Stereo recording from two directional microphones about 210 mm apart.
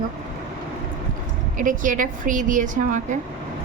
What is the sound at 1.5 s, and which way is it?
A woman's voice, 40° right (ahead or behind).